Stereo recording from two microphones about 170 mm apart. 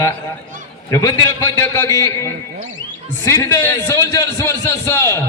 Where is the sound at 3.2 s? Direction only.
15° left (ahead or behind).